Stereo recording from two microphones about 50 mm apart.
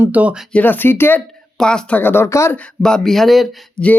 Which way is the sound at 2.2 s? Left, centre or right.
Left.